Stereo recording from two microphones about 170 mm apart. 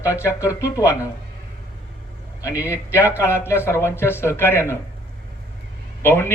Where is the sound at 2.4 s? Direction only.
10° right (ahead or behind).